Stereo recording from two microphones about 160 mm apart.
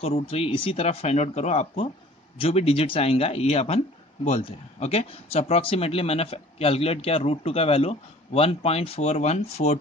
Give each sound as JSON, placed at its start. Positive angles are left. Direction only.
{"t": 0.0, "sound": "a man's voice", "side_deg": 40}